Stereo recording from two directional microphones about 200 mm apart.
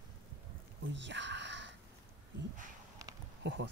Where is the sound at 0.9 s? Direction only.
60° right (ahead or behind).